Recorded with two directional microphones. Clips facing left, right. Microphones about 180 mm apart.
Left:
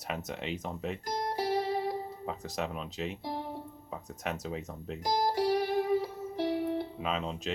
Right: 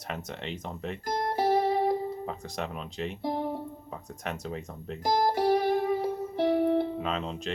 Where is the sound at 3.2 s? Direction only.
55° right (ahead or behind).